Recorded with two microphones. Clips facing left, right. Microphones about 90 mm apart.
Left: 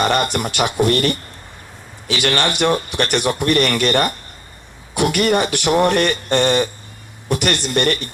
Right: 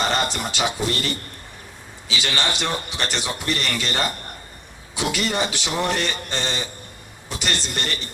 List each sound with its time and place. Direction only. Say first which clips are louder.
0.0 s speech: left 5 dB; 60° left (ahead or behind)